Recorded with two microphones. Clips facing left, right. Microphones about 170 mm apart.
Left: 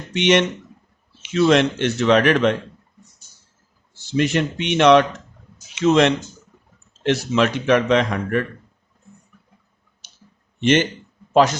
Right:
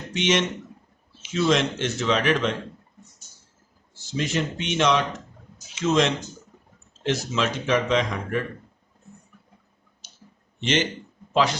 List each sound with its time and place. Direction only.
0.1 s a man's voice: 65° left (ahead or behind)
4.0 s a man's voice: 65° left (ahead or behind)
10.6 s speech: 55° left (ahead or behind)